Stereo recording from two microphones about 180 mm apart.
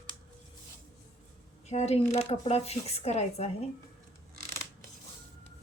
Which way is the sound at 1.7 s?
35° left (ahead or behind).